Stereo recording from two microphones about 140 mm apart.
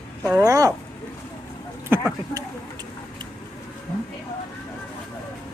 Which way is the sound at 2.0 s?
20° right (ahead or behind).